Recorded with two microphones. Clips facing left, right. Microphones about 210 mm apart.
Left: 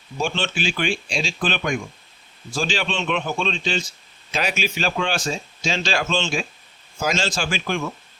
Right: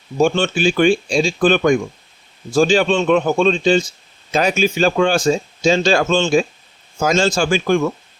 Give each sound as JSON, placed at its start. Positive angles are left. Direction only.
{"t": 0.2, "sound": "speech", "side_deg": -45}